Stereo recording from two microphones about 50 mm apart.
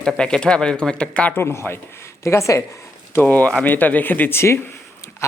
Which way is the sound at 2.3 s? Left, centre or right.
Left.